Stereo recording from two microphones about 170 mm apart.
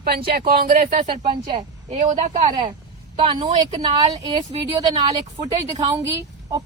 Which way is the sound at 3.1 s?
30° right (ahead or behind).